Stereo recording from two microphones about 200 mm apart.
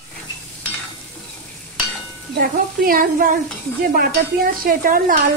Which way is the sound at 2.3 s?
45° right (ahead or behind).